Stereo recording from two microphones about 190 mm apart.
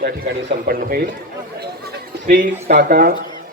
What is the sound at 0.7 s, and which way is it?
Speech, 50° right (ahead or behind).